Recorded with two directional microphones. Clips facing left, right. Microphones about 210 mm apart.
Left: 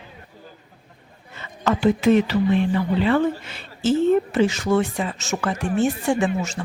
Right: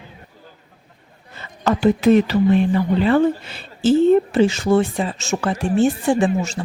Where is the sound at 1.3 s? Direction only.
35° right (ahead or behind).